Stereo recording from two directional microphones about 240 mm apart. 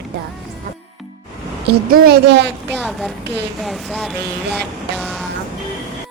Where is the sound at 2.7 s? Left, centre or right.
Centre.